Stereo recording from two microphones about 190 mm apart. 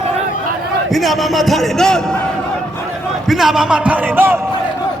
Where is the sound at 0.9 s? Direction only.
Centre (ahead or behind).